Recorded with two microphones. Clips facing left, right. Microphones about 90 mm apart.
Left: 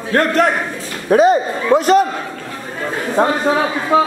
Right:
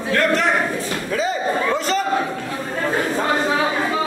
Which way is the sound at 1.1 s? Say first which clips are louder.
Left 10 dB; 60° left (ahead or behind).